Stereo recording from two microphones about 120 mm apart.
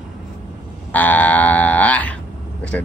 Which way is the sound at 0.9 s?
15° left (ahead or behind).